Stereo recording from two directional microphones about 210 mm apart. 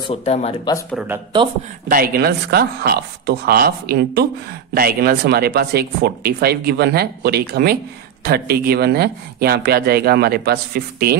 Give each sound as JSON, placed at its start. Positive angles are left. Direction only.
{"t": 0.0, "sound": "speech", "side_deg": 30}
{"t": 0.9, "sound": "speech", "side_deg": -10}
{"t": 1.9, "sound": "speech", "side_deg": -45}